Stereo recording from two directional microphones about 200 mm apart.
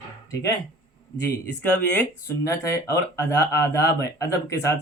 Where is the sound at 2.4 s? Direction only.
15° left (ahead or behind).